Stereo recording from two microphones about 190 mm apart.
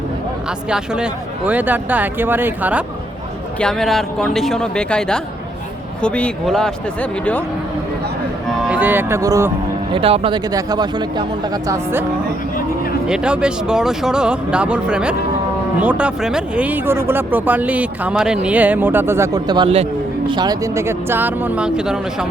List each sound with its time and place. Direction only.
0.7 s speech: 5° right (ahead or behind)
3.6 s speech: centre (ahead or behind)
8.4 s speech: 5° right (ahead or behind)
9.9 s speech: 30° right (ahead or behind)
13.1 s speech: 5° right (ahead or behind)